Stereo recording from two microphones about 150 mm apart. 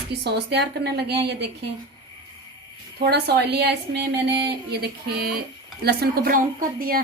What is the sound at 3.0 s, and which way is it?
A woman's voice, 90° right.